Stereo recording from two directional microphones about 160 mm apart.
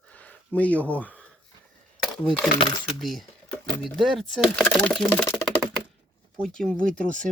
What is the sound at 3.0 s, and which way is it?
Speech, centre (ahead or behind).